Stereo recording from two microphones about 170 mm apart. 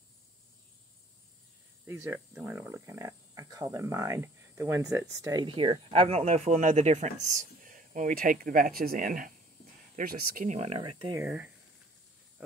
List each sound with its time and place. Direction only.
1.9 s speech: 15° right (ahead or behind); by 10.8 s 40° right (ahead or behind)
10.8 s speech: 25° right (ahead or behind)
11.2 s speech: 10° right (ahead or behind)